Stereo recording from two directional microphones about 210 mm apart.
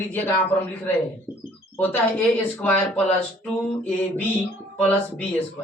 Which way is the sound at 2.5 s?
10° left (ahead or behind).